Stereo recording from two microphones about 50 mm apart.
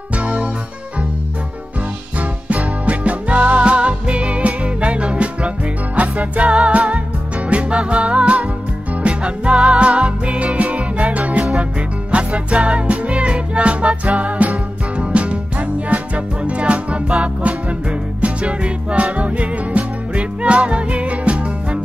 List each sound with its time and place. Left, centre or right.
0.1 s music: right
2.8 s music: right